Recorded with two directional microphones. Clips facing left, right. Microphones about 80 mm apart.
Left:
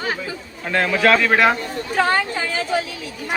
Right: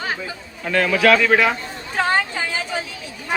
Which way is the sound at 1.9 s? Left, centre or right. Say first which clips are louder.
Left 1 dB; centre.